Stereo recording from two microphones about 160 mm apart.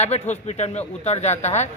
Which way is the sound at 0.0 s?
45° left (ahead or behind).